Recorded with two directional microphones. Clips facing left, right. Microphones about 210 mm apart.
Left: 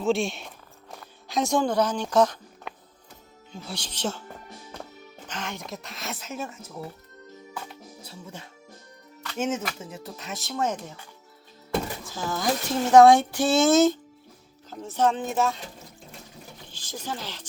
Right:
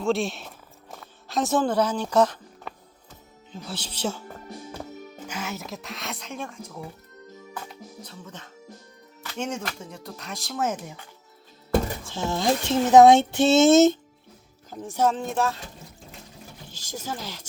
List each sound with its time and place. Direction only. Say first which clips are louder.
0.0 s a sound: even; centre (ahead or behind)
2.2 s speech: even; 5° right (ahead or behind)
5.3 s speech: right 1 dB; 5° right (ahead or behind)
8.0 s speech: even; 10° left (ahead or behind); by 10.9 s 5° right (ahead or behind)
12.0 s speech: right 3 dB; 25° right (ahead or behind)
14.7 s speech: even; 10° right (ahead or behind)
15.2 s speech: even; centre (ahead or behind)
16.8 s speech: right 1 dB; 10° right (ahead or behind)